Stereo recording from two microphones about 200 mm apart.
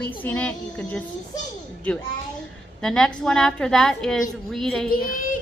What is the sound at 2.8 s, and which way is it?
A woman's voice, 5° left (ahead or behind).